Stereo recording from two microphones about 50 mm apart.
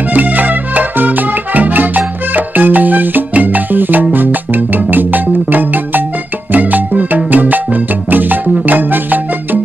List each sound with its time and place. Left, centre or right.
0.1 s music: right